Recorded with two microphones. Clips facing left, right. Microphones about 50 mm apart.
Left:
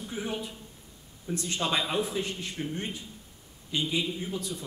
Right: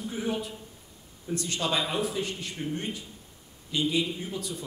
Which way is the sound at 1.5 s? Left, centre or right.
Centre.